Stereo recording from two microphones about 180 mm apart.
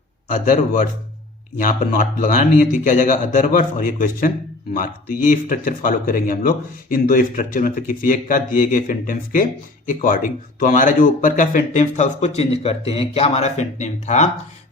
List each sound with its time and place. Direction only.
0.3 s speech: 45° left (ahead or behind)